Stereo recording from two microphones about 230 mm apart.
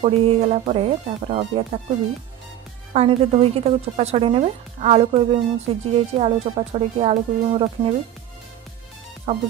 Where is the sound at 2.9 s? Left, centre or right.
Right.